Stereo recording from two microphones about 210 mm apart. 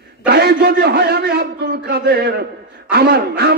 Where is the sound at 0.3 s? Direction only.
50° right (ahead or behind).